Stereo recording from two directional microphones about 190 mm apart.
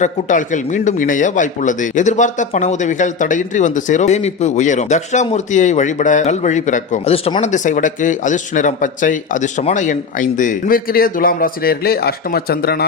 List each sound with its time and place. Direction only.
0.0 s speech: 40° left (ahead or behind)
7.4 s speech: 40° left (ahead or behind)